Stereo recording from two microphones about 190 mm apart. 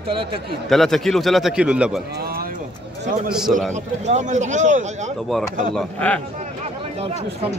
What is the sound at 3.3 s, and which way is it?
Speech, centre (ahead or behind).